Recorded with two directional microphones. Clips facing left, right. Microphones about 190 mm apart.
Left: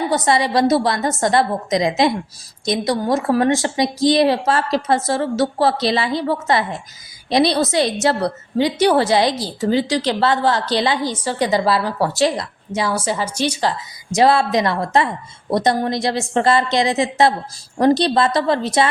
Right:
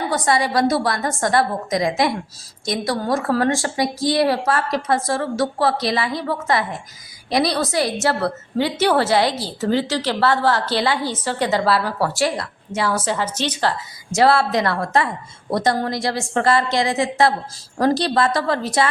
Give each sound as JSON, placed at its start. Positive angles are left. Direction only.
{"t": 0.1, "sound": "a woman's voice", "side_deg": 25}